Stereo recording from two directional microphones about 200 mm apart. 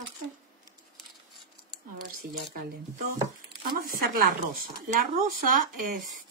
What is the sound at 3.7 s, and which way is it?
Speech, 45° right (ahead or behind).